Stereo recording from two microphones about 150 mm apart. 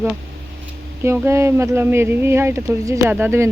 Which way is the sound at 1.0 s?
15° right (ahead or behind).